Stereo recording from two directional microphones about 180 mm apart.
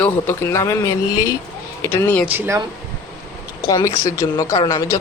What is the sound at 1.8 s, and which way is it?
Speech, 10° left (ahead or behind).